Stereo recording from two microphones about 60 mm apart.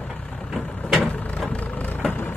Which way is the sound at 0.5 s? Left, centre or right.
Centre.